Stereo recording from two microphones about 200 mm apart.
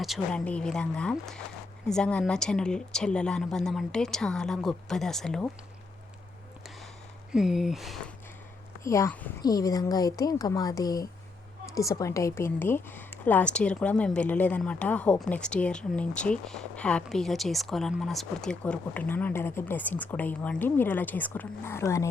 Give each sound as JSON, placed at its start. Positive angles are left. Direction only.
{"t": 0.0, "sound": "a woman's voice", "side_deg": 0}
{"t": 7.3, "sound": "a woman's voice", "side_deg": 0}
{"t": 8.8, "sound": "speech", "side_deg": 15}